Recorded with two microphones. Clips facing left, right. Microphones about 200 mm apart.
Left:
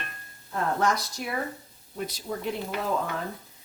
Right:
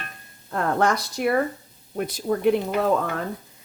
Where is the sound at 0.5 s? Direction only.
60° right (ahead or behind).